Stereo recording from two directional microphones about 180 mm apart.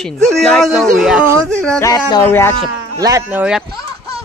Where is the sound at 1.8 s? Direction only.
20° left (ahead or behind).